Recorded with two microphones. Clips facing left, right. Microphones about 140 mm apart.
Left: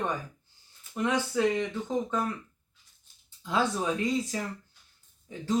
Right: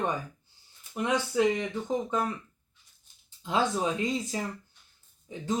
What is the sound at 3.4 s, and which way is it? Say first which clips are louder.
Speech: right 1 dB; 20° right (ahead or behind).